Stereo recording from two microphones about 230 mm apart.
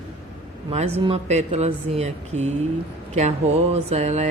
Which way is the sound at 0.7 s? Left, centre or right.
Right.